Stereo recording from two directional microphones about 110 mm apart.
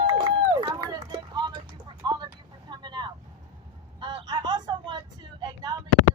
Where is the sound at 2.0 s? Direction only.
40° right (ahead or behind).